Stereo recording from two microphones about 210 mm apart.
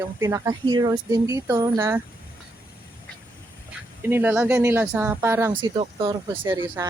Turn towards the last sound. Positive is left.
turn(degrees=-15)  # may be behind; listen again after turning